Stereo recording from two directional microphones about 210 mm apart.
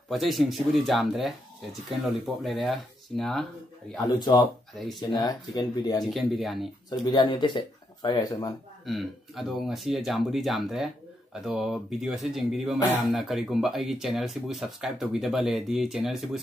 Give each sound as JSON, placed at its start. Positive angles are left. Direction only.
{"t": 0.1, "sound": "speech", "side_deg": 0}
{"t": 4.0, "sound": "speech", "side_deg": 20}
{"t": 4.7, "sound": "speech", "side_deg": 0}
{"t": 5.1, "sound": "speech", "side_deg": 20}
{"t": 6.0, "sound": "speech", "side_deg": 0}
{"t": 7.1, "sound": "speech", "side_deg": 20}
{"t": 8.8, "sound": "speech", "side_deg": 0}